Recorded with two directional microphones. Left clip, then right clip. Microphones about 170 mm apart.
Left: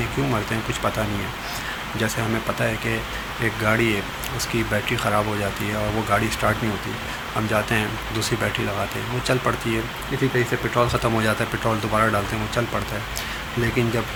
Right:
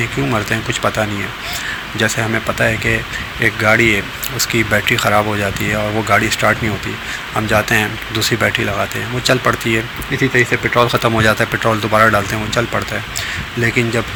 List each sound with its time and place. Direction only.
0.3 s speech: 25° right (ahead or behind)